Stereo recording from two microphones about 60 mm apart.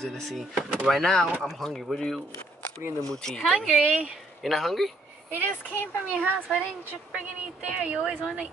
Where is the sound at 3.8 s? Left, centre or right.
Right.